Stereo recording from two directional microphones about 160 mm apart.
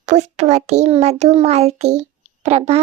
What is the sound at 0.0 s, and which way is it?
A child's voice, 45° right (ahead or behind).